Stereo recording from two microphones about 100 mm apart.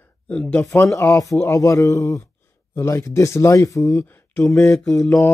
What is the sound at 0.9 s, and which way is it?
Speech, 30° left (ahead or behind).